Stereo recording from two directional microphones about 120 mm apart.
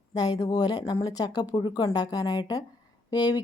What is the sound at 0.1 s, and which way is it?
A woman's voice, 30° left (ahead or behind).